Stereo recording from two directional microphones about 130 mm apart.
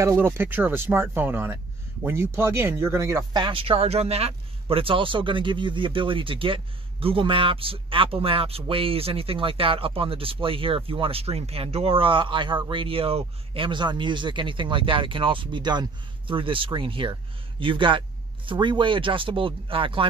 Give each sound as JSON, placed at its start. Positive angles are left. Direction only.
{"t": 0.0, "sound": "speech", "side_deg": -20}
{"t": 3.3, "sound": "speech", "side_deg": -40}